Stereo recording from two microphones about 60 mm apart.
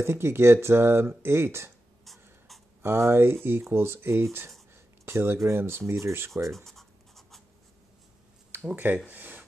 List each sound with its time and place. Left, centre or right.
0.0 s speech: right
2.0 s a sound: centre
2.8 s speech: right
6.5 s scratch: centre
8.7 s speech: right